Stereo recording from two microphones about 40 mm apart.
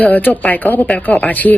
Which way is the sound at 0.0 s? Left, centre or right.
Left.